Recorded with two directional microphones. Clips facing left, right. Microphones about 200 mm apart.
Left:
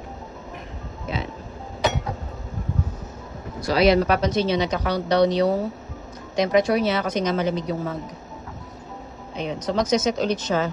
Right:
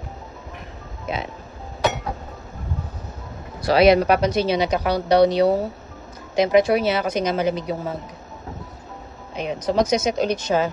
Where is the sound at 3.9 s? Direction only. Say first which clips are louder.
Right 2 dB; 15° right (ahead or behind).